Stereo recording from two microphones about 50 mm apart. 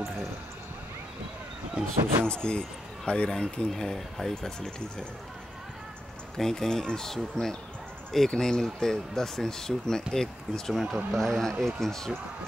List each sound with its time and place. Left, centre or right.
2.2 s speech: left
6.3 s speech: centre